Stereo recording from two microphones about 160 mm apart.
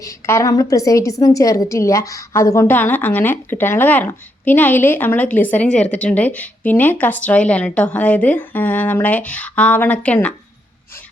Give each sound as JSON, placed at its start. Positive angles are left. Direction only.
{"t": 0.0, "sound": "a woman's voice", "side_deg": 20}